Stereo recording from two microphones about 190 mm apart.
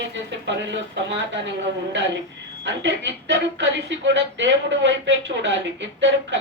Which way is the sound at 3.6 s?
70° right (ahead or behind).